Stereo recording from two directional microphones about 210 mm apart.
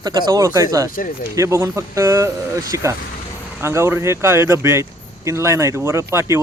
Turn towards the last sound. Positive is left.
turn(degrees=-15)  # may be behind; listen again after turning